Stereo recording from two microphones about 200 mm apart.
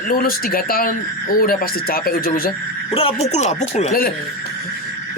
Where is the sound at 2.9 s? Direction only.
30° left (ahead or behind).